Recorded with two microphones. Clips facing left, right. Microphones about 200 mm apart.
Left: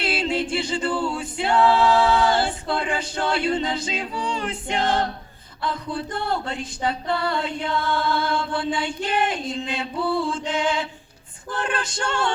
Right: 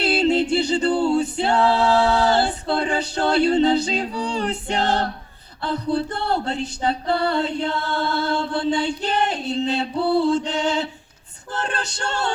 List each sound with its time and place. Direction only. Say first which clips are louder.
0.0 s music: right 6 dB; 35° right (ahead or behind)
1.1 s singing: right 3 dB; 40° right (ahead or behind)
5.6 s a sound: right 5 dB; 35° right (ahead or behind)